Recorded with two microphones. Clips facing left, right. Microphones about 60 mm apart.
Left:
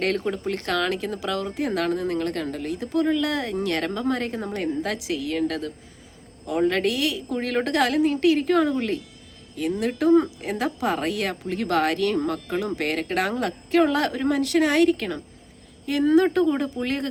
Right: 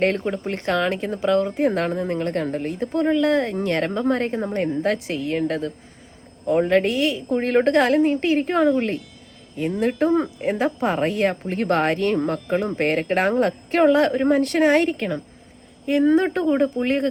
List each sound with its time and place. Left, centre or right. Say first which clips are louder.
0.0 s speech: right 3 dB; right